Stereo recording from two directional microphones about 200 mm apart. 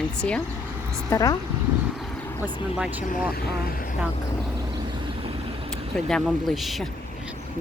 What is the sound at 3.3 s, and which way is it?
Speech, 50° left (ahead or behind).